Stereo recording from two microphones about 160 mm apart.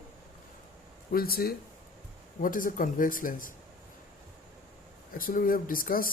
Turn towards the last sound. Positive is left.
turn(degrees=60)  # may be behind; listen again after turning